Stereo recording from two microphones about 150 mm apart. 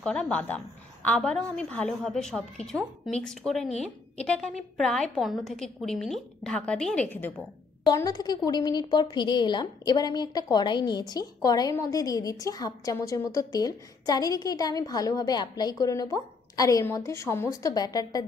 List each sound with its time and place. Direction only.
0.0 s a woman's voice: 5° left (ahead or behind)
7.8 s a woman's voice: 25° left (ahead or behind)